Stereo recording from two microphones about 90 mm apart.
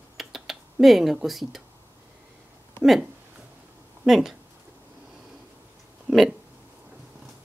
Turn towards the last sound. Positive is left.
turn(degrees=-5)  # may be behind; listen again after turning